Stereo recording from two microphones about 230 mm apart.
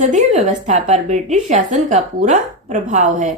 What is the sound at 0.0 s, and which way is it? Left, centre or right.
A woman's voice, right.